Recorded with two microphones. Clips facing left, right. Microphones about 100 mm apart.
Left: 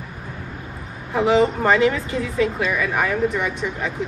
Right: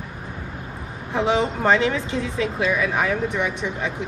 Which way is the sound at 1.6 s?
20° right (ahead or behind).